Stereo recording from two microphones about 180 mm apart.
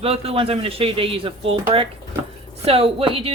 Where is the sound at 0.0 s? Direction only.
35° right (ahead or behind).